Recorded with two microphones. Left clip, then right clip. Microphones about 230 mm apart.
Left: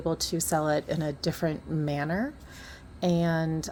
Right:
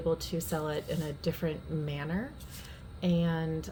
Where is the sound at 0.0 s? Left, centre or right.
Left.